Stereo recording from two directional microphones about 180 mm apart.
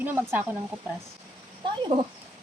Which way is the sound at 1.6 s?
25° right (ahead or behind).